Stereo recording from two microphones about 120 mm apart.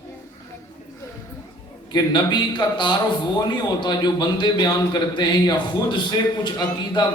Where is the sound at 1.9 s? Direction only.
40° left (ahead or behind).